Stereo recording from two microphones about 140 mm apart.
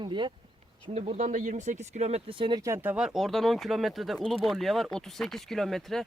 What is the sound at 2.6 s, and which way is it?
Speech, 15° right (ahead or behind).